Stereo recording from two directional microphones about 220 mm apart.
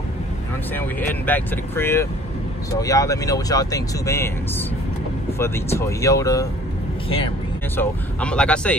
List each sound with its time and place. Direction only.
0.7 s speech: 10° left (ahead or behind)
7.7 s speech: 5° left (ahead or behind)